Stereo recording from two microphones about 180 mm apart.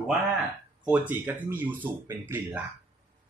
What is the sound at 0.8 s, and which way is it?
Speech, 10° right (ahead or behind).